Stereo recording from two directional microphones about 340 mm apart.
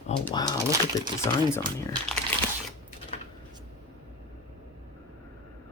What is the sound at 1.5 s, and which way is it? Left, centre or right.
Speech, centre.